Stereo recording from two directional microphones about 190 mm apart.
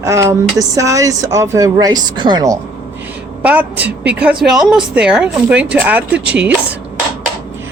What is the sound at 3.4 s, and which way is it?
A woman's voice, 10° right (ahead or behind).